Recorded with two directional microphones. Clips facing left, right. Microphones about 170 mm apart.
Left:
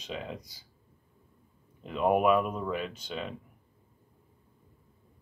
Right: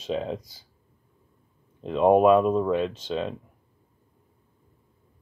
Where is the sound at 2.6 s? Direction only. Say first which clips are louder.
Right 9 dB; 90° right.